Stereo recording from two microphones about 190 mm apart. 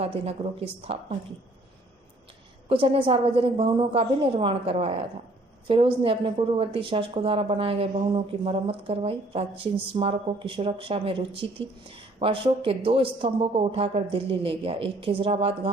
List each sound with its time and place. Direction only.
0.0 s speech: 30° right (ahead or behind)
2.6 s a woman's voice: 30° right (ahead or behind)